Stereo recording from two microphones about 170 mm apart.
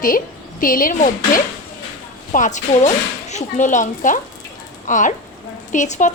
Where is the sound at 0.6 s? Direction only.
55° left (ahead or behind).